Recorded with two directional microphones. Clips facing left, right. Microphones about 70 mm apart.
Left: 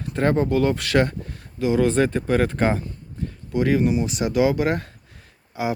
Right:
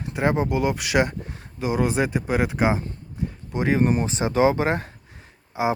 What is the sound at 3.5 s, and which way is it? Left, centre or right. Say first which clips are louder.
Speech: left 1 dB; right.